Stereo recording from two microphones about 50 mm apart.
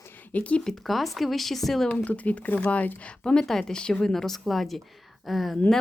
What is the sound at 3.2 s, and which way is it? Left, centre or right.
Speech, centre.